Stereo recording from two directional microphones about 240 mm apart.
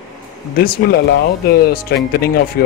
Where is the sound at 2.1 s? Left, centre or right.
Left.